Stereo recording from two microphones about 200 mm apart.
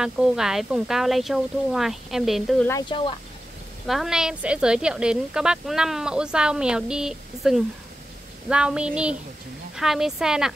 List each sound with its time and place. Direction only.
0.0 s speech: 5° right (ahead or behind)
2.7 s speech: 25° left (ahead or behind)
3.8 s speech: centre (ahead or behind)